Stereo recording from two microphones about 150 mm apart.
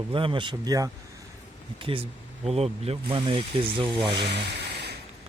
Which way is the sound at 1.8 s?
35° right (ahead or behind).